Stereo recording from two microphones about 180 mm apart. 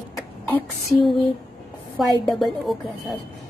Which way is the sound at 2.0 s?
Centre (ahead or behind).